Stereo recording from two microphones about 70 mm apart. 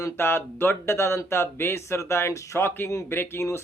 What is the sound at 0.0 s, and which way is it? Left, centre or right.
Speech, left.